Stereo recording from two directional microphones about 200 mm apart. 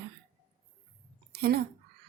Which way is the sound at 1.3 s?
55° right (ahead or behind).